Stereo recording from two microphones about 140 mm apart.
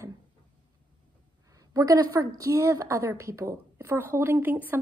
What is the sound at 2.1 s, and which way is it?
A woman's voice, 25° right (ahead or behind).